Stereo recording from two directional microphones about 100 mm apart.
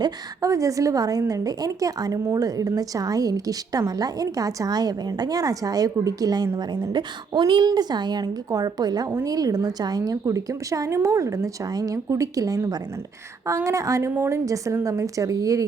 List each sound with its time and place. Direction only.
0.0 s a woman's voice: 35° right (ahead or behind)
6.9 s a woman's voice: 45° right (ahead or behind)